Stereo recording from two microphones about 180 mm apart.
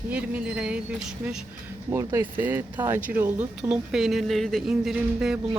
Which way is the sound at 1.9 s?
20° right (ahead or behind).